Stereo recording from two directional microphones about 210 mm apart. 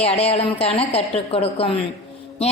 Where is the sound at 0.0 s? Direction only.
30° left (ahead or behind).